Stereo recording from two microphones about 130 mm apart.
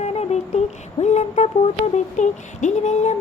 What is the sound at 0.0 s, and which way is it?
Music, 55° left (ahead or behind).